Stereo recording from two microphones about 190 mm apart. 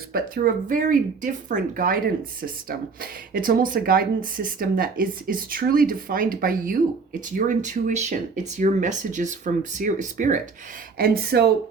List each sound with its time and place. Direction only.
0.1 s speech: 50° right (ahead or behind)
10.9 s speech: 50° right (ahead or behind)